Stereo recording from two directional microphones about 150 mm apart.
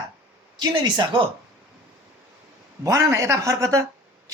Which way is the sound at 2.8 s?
20° right (ahead or behind).